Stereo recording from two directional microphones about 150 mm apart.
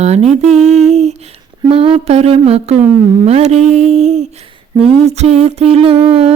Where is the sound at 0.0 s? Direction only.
45° right (ahead or behind).